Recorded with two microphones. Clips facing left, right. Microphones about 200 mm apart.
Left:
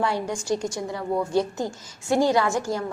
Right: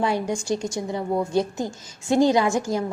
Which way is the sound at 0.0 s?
20° right (ahead or behind).